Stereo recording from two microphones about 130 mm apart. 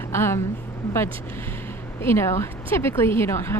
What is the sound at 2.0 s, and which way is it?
Speech, 20° left (ahead or behind).